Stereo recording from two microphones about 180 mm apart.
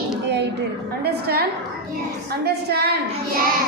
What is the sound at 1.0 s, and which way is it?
Child singing, 60° right (ahead or behind).